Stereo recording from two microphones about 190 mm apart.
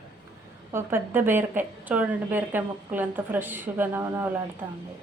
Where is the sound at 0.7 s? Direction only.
10° right (ahead or behind).